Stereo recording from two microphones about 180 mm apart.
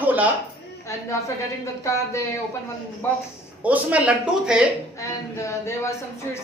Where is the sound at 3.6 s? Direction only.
10° right (ahead or behind).